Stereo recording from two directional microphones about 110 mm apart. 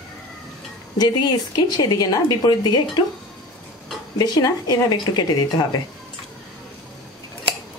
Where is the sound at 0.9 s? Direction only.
40° left (ahead or behind).